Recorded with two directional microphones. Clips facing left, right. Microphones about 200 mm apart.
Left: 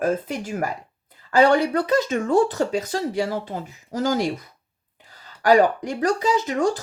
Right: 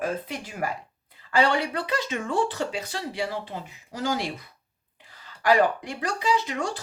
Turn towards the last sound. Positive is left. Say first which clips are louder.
# left 5 dB
turn(degrees=45)  # may be behind; listen again after turning